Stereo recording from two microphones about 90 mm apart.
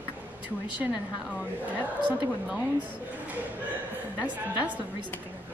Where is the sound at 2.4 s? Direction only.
15° right (ahead or behind).